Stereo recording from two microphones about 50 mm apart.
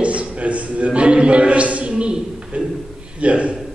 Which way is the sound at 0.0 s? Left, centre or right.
Right.